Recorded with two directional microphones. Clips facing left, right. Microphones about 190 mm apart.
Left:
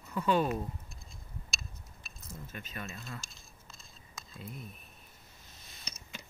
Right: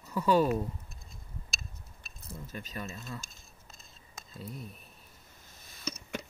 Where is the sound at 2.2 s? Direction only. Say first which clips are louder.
Right 3 dB; 35° right (ahead or behind).